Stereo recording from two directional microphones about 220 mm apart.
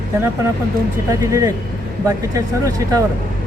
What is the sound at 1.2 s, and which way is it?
Speech, 15° right (ahead or behind).